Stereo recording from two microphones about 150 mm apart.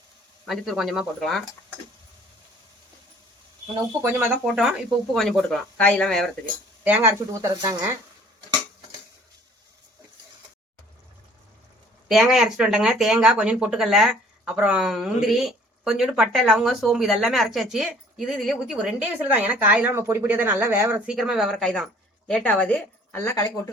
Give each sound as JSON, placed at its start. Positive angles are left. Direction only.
{"t": 0.4, "sound": "speech", "side_deg": 0}
{"t": 4.0, "sound": "speech", "side_deg": -10}
{"t": 6.8, "sound": "speech", "side_deg": -15}
{"t": 12.0, "sound": "speech", "side_deg": 0}
{"t": 21.1, "sound": "speech", "side_deg": 0}